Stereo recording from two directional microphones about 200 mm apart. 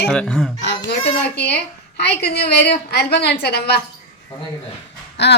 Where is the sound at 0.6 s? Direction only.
60° left (ahead or behind).